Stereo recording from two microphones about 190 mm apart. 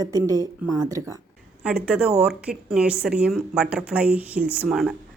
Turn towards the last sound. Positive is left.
turn(degrees=-5)  # may be behind; listen again after turning